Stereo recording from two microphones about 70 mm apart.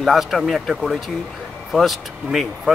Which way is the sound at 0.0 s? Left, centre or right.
Centre.